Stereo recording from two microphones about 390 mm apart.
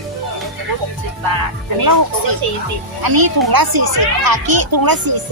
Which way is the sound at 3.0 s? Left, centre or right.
Right.